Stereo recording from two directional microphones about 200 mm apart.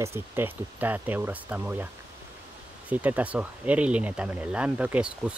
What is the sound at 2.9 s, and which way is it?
Speech, 5° right (ahead or behind).